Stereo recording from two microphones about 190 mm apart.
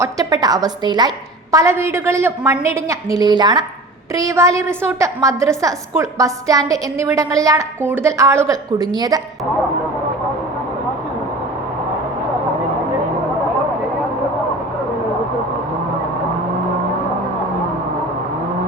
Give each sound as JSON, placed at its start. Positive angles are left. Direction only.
{"t": 0.0, "sound": "a woman's voice", "side_deg": -20}